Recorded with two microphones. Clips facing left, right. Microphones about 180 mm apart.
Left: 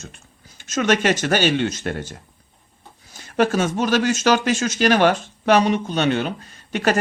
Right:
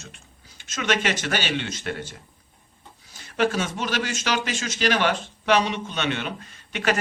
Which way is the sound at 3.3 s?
45° left (ahead or behind).